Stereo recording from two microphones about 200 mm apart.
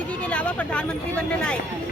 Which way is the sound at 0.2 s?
5° left (ahead or behind).